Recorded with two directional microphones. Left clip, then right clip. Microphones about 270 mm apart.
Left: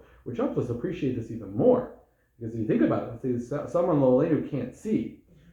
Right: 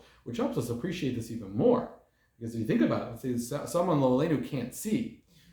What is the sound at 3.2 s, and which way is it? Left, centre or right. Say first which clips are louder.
Speech: left 4 dB; right.